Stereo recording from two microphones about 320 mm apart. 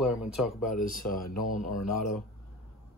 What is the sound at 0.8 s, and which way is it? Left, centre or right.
Speech, left.